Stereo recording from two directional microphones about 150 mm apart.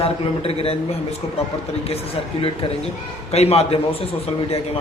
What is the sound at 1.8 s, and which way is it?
A man's voice, 40° left (ahead or behind).